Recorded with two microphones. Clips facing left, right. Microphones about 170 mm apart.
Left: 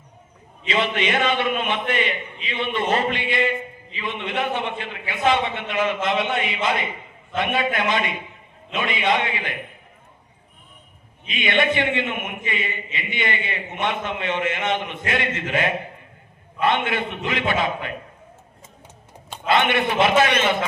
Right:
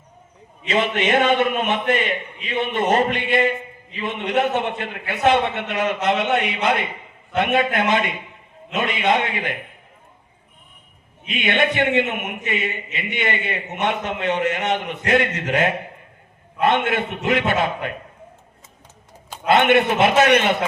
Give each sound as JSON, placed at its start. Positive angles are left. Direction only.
{"t": 0.7, "sound": "a man's voice", "side_deg": -45}
{"t": 6.5, "sound": "a man's voice", "side_deg": -60}
{"t": 7.5, "sound": "a man's voice", "side_deg": -45}
{"t": 11.3, "sound": "a man's voice", "side_deg": -45}
{"t": 19.5, "sound": "a man's voice", "side_deg": -45}
{"t": 20.3, "sound": "a man's voice", "side_deg": -55}